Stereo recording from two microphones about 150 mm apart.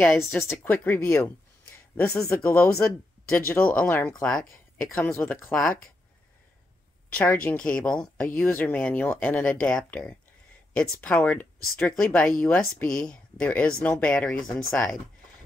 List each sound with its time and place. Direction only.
0.0 s speech: 15° left (ahead or behind)
5.0 s speech: 15° left (ahead or behind)
7.2 s speech: 10° left (ahead or behind)